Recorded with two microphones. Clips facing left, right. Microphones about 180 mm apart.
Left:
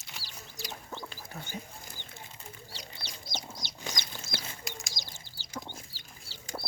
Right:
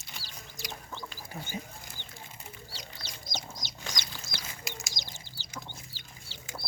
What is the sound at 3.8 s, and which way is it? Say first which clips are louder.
Chicken: left 2 dB; 15° left (ahead or behind).